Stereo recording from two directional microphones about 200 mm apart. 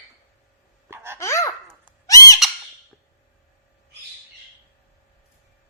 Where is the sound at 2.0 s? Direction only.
15° left (ahead or behind).